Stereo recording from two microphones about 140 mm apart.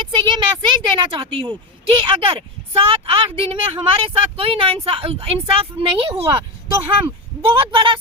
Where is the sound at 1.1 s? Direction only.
40° right (ahead or behind).